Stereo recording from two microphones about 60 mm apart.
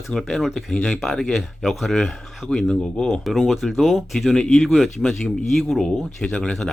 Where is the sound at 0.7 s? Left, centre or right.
Centre.